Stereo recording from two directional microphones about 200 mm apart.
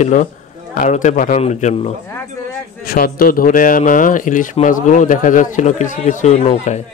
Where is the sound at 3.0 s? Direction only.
45° left (ahead or behind).